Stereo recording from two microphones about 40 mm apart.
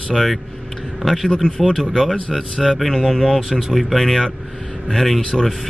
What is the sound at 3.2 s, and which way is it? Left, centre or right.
Speech, centre.